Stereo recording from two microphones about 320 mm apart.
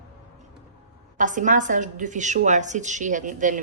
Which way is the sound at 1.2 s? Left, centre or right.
Right.